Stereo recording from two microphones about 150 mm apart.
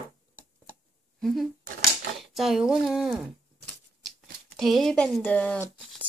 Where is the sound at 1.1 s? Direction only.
Centre (ahead or behind).